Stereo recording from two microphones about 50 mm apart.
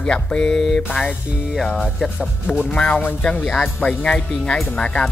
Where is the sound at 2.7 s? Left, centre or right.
Left.